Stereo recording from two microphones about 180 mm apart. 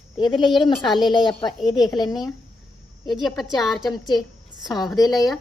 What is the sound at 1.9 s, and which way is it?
Speech, 25° left (ahead or behind).